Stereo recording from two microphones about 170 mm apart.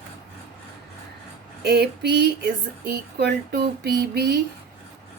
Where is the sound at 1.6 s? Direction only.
75° right (ahead or behind).